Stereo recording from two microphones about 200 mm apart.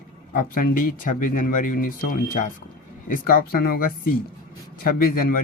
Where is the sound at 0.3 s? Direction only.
45° left (ahead or behind).